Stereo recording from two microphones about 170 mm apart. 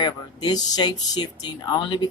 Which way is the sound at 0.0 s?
25° left (ahead or behind).